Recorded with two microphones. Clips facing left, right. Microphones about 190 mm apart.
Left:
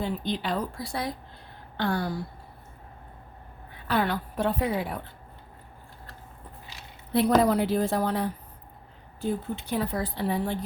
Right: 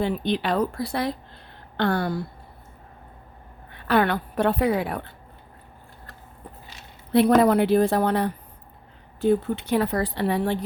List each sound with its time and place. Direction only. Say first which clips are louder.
0.0 s speech: right 5 dB; 70° right (ahead or behind)
1.7 s a sound: right 4 dB; 65° right (ahead or behind)
3.7 s a woman's voice: right 5 dB; 65° right (ahead or behind)
7.1 s a woman's voice: right 4 dB; 65° right (ahead or behind)